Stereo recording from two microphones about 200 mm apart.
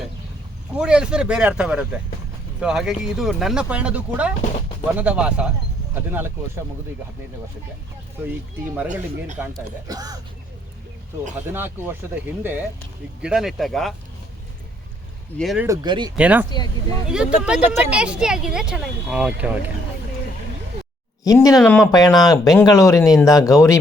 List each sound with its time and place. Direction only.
0.8 s speech: 5° right (ahead or behind)
8.2 s speech: 10° right (ahead or behind)
8.9 s speech: 40° right (ahead or behind)
9.8 s speech: 20° right (ahead or behind)
11.4 s speech: 10° right (ahead or behind)
15.4 s speech: centre (ahead or behind)
15.6 s speech: 20° right (ahead or behind)
16.1 s speech: 10° right (ahead or behind)
21.2 s speech: 15° left (ahead or behind)
21.6 s speech: 5° left (ahead or behind)
21.9 s speech: 20° left (ahead or behind)